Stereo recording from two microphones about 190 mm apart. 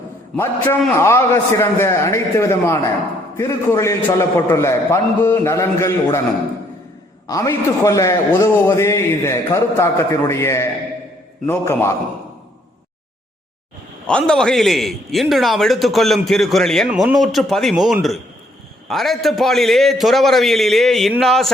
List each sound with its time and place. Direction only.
0.3 s a man's voice: 10° left (ahead or behind)
7.3 s a man's voice: 15° left (ahead or behind)
14.1 s a man's voice: 5° left (ahead or behind)